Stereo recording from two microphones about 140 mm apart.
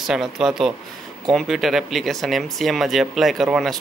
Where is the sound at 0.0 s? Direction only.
Centre (ahead or behind).